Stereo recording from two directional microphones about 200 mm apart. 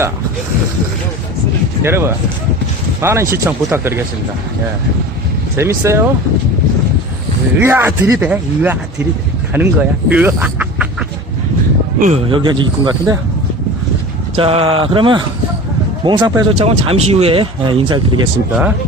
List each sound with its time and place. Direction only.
1.8 s speech: 10° right (ahead or behind)
5.5 s speech: 15° right (ahead or behind)
7.6 s speech: 10° right (ahead or behind)
11.9 s speech: 40° right (ahead or behind)
12.3 s speech: 25° right (ahead or behind)
14.3 s speech: 30° right (ahead or behind)